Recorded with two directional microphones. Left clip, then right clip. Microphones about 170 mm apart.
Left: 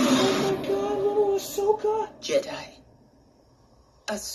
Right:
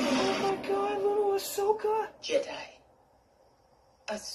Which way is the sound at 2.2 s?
40° left (ahead or behind).